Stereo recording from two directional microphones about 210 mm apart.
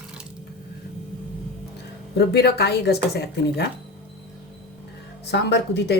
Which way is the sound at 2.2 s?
50° left (ahead or behind).